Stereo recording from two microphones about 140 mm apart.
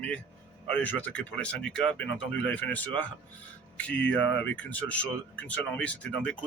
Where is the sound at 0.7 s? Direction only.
10° left (ahead or behind).